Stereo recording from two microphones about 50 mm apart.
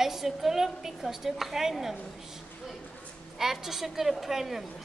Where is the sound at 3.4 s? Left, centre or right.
Centre.